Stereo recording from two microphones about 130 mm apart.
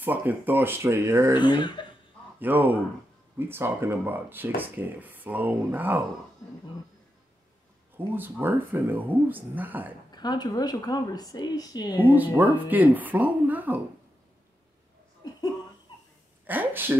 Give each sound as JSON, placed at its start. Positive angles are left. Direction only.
{"t": 0.0, "sound": "speech", "side_deg": -15}
{"t": 1.4, "sound": "a woman's voice", "side_deg": 35}
{"t": 2.4, "sound": "speech", "side_deg": -15}
{"t": 8.1, "sound": "speech", "side_deg": -15}
{"t": 10.1, "sound": "a woman's voice", "side_deg": 35}
{"t": 12.0, "sound": "speech", "side_deg": -15}
{"t": 15.2, "sound": "laughter", "side_deg": 30}
{"t": 16.4, "sound": "a sound", "side_deg": -15}